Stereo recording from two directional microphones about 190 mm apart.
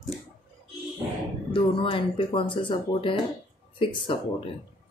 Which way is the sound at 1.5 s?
25° left (ahead or behind).